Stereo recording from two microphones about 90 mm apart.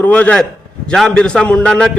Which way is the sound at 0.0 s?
15° left (ahead or behind).